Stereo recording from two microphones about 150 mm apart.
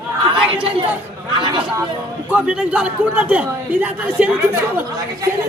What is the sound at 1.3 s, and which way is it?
Speech, 35° right (ahead or behind).